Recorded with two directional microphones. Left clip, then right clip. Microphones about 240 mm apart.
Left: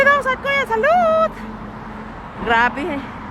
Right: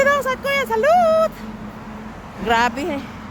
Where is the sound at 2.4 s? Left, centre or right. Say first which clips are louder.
Left 1 dB; right.